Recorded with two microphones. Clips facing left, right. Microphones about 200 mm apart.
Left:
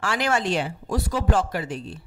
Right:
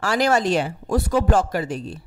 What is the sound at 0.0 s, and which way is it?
Speech, 40° right (ahead or behind).